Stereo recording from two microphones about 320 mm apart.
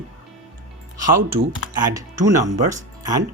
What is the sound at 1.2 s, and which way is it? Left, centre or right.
Speech, right.